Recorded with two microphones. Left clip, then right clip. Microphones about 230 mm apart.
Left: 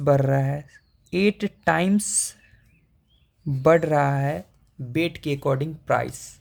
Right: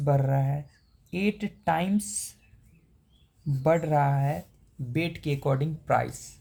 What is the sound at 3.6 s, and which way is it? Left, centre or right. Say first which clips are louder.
Speech: left 6 dB; left.